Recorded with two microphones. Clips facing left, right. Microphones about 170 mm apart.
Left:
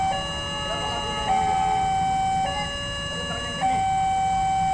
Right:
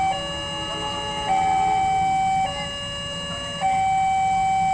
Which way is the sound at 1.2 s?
10° right (ahead or behind).